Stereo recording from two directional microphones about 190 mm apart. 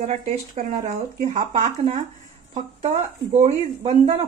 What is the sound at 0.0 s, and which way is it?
A woman's voice, 45° right (ahead or behind).